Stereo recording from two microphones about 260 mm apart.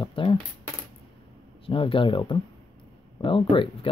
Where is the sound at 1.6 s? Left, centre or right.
Centre.